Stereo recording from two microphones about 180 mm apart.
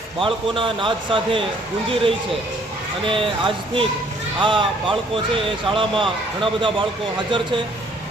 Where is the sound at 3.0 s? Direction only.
30° right (ahead or behind).